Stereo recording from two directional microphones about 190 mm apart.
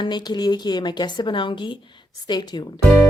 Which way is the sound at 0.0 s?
20° left (ahead or behind).